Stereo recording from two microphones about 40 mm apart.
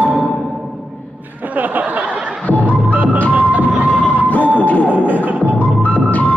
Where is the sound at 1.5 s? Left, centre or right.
Right.